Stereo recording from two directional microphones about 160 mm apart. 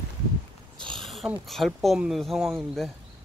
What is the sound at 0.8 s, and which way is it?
Speech, 5° left (ahead or behind).